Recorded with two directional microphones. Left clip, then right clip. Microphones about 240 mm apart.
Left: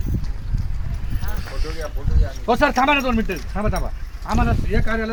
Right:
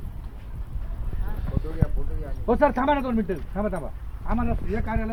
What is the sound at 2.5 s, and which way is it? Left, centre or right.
Speech, right.